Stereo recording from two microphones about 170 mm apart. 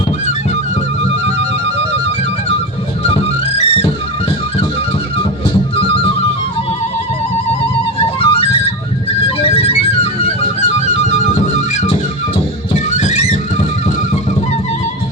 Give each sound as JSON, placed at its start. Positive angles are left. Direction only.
{"t": 3.0, "sound": "music", "side_deg": 35}
{"t": 8.2, "sound": "music", "side_deg": 35}
{"t": 13.0, "sound": "music", "side_deg": 45}